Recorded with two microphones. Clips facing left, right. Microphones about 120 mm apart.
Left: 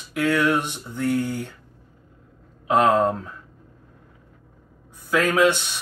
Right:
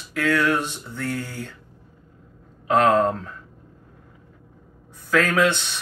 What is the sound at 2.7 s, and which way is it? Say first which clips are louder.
Speech: even; 10° left (ahead or behind).